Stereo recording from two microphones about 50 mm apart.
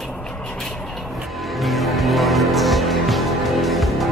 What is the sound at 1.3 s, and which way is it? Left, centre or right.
Music, centre.